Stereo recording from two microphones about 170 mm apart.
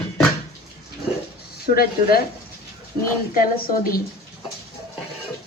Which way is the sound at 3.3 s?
60° left (ahead or behind).